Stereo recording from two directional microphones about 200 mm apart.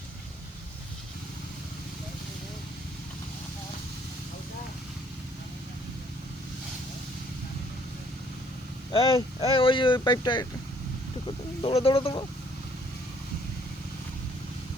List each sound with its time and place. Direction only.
8.9 s speech: 25° left (ahead or behind)